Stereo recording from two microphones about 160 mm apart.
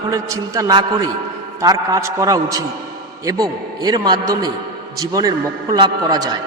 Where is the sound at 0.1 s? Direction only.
20° right (ahead or behind).